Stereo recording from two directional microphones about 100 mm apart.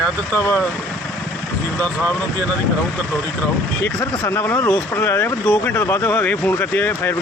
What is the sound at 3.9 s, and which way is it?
Speech, 30° left (ahead or behind).